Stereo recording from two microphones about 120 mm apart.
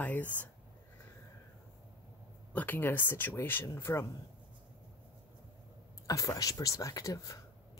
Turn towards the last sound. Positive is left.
turn(degrees=30)  # may be behind; listen again after turning